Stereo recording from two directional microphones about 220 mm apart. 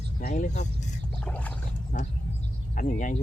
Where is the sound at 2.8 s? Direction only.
35° left (ahead or behind).